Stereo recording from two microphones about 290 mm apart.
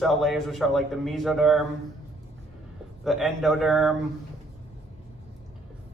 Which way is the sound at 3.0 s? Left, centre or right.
Centre.